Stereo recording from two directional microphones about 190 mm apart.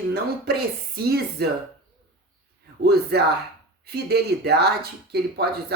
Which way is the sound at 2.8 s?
55° right (ahead or behind).